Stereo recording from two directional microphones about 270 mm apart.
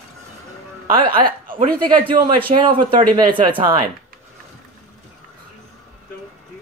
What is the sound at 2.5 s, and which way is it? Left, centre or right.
Speech, right.